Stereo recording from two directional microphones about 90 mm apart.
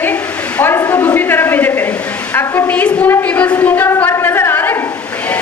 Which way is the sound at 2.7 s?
15° left (ahead or behind).